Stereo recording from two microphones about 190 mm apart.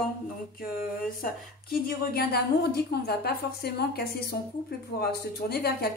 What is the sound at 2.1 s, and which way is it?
A woman's voice, 55° left (ahead or behind).